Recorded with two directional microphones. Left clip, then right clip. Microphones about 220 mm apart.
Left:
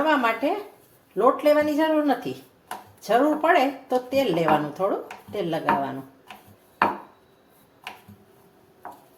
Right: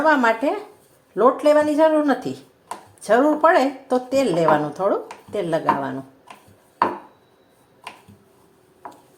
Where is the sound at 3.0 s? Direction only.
25° right (ahead or behind).